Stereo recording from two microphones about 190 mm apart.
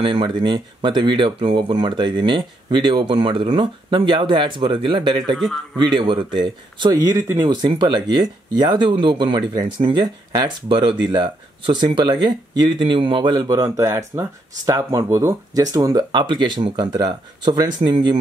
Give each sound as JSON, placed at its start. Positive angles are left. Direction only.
{"t": 0.0, "sound": "speech", "side_deg": -25}